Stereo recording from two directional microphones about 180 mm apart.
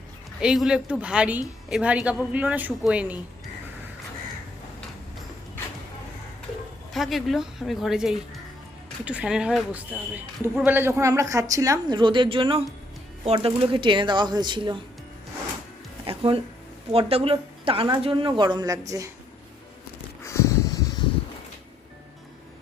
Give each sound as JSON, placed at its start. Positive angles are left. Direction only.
{"t": 0.4, "sound": "a woman's voice", "side_deg": -5}
{"t": 6.9, "sound": "a woman's voice", "side_deg": 0}
{"t": 16.0, "sound": "music", "side_deg": -30}
{"t": 16.9, "sound": "speech", "side_deg": -30}
{"t": 20.2, "sound": "a sound", "side_deg": 15}